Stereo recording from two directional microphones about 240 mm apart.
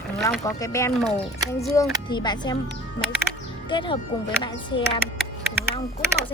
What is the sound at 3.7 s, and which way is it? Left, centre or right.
Speech, left.